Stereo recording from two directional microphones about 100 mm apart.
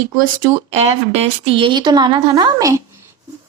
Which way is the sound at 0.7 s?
90° right.